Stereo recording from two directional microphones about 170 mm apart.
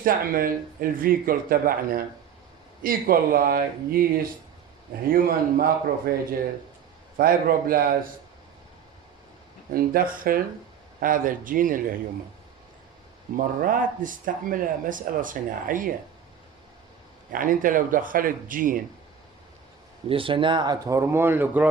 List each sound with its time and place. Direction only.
0.0 s speech: 55° right (ahead or behind)
9.7 s speech: 55° right (ahead or behind)
13.3 s speech: 55° right (ahead or behind)
17.3 s speech: 55° right (ahead or behind)
20.1 s speech: 30° right (ahead or behind); by 21.7 s 10° right (ahead or behind)